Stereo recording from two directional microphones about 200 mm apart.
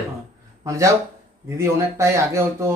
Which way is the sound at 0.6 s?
15° right (ahead or behind).